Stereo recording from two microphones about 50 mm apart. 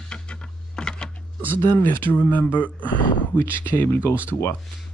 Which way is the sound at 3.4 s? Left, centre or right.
Left.